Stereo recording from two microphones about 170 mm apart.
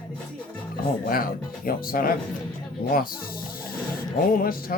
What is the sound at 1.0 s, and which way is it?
Speech, 55° left (ahead or behind).